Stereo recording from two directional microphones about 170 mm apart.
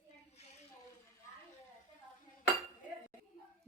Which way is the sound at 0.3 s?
40° left (ahead or behind).